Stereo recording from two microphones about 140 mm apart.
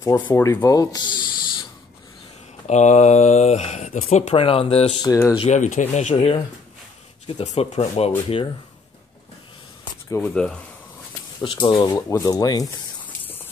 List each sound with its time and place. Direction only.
0.3 s speech: 20° left (ahead or behind)
2.6 s speech: 55° left (ahead or behind)
5.0 s speech: 25° left (ahead or behind)
5.4 s speech: 60° left (ahead or behind)
6.1 s speech: 40° left (ahead or behind)
7.2 s speech: 50° left (ahead or behind)
10.0 s speech: 20° left (ahead or behind)
10.3 s speech: 5° left (ahead or behind)
11.4 s speech: 30° left (ahead or behind)
13.0 s a sound: 15° left (ahead or behind)